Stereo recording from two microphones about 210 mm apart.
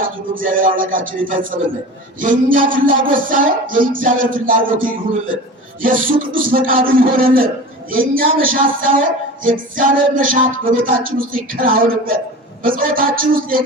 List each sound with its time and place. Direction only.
0.0 s music: 40° right (ahead or behind)
1.5 s a sound: 35° right (ahead or behind)
12.6 s speech: 40° right (ahead or behind)